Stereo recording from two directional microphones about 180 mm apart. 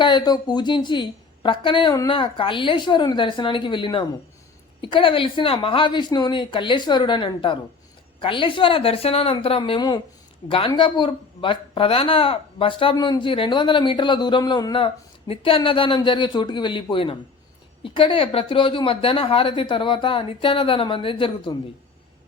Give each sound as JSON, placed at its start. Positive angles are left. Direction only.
{"t": 0.0, "sound": "speech", "side_deg": 25}